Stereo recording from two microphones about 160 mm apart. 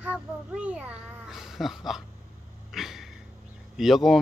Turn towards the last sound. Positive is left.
turn(degrees=0)  # may be behind; listen again after turning